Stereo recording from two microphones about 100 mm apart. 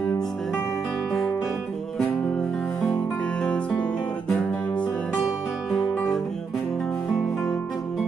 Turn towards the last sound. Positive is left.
turn(degrees=5)  # may be behind; listen again after turning